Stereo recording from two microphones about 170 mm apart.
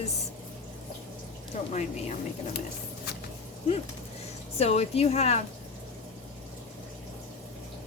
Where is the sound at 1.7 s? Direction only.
45° left (ahead or behind).